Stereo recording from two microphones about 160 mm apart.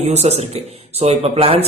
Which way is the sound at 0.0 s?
40° right (ahead or behind).